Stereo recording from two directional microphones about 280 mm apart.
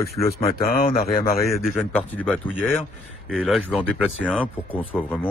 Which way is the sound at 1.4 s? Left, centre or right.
Centre.